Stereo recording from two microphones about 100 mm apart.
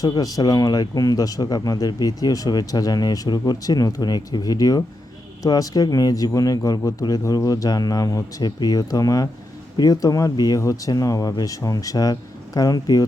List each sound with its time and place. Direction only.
0.0 s speech: 35° left (ahead or behind)